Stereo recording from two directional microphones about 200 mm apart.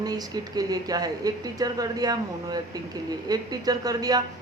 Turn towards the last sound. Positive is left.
turn(degrees=-20)  # may be behind; listen again after turning